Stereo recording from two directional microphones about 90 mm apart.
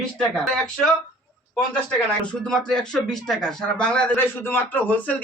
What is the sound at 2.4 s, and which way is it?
A man's voice, 10° left (ahead or behind).